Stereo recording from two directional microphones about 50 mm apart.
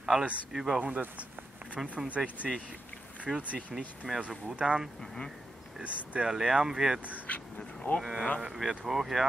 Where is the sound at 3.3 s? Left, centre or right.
Centre.